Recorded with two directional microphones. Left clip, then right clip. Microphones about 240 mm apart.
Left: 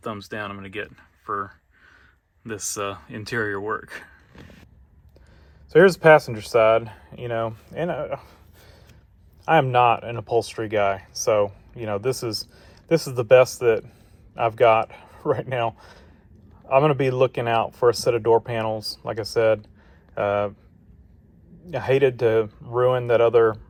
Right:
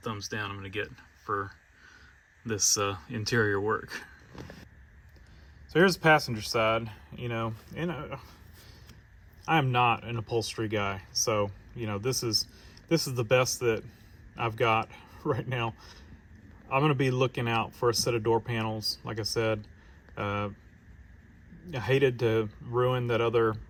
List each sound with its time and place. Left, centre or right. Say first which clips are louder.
0.0 s speech: left 4 dB; centre
5.7 s speech: left 9 dB; centre
9.4 s speech: left 8 dB; centre
21.7 s speech: left 7 dB; centre